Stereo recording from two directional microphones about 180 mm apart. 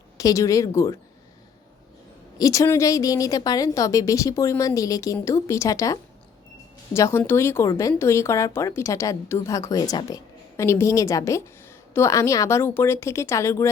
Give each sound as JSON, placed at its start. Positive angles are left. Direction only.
{"t": 0.2, "sound": "a woman's voice", "side_deg": 20}
{"t": 2.4, "sound": "a woman's voice", "side_deg": 20}